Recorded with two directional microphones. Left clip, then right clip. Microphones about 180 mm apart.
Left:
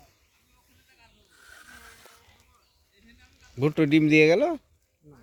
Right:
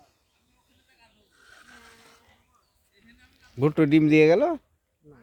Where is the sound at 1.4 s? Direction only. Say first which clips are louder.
Left 2 dB; 45° left (ahead or behind).